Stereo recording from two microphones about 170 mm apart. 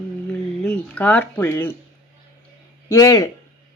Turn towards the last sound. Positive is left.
turn(degrees=20)  # may be behind; listen again after turning